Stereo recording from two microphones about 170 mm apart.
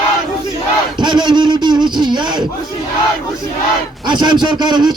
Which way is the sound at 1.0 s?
25° right (ahead or behind).